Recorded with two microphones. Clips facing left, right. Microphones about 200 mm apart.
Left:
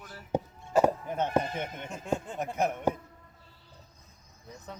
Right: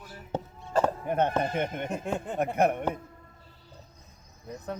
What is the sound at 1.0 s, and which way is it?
Speech, 60° right (ahead or behind).